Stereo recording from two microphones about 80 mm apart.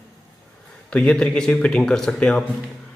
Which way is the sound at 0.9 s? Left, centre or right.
Centre.